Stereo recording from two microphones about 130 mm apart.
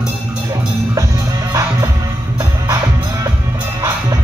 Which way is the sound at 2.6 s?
25° right (ahead or behind).